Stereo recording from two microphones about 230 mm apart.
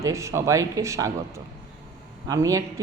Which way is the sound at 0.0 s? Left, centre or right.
Centre.